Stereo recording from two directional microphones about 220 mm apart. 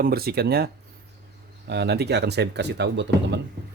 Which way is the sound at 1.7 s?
50° right (ahead or behind).